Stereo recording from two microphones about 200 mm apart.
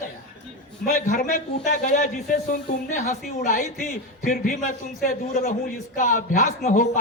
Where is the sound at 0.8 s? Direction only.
40° left (ahead or behind).